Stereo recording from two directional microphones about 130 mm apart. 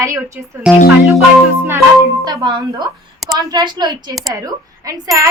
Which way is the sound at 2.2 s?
35° right (ahead or behind).